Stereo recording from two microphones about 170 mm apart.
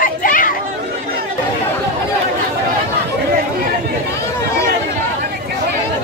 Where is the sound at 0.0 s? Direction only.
55° left (ahead or behind).